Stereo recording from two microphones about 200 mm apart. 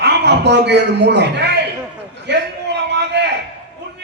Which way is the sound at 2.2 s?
60° right (ahead or behind).